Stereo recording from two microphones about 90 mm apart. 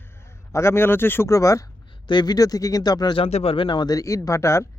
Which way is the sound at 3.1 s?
85° left.